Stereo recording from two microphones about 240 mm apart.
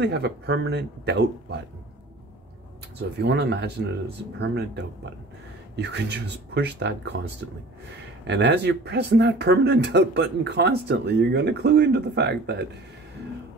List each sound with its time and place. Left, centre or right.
0.0 s speech: right
3.0 s speech: right
8.3 s speech: right